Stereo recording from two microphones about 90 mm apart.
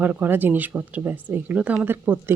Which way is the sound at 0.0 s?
20° right (ahead or behind).